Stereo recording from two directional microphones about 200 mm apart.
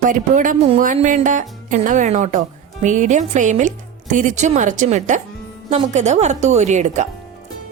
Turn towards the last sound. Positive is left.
turn(degrees=-35)  # may be behind; listen again after turning